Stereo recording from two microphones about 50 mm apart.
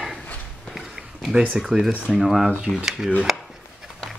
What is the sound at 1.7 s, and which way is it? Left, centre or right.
Speech, centre.